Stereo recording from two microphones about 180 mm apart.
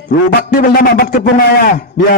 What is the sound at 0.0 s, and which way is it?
A man's voice, 60° left (ahead or behind).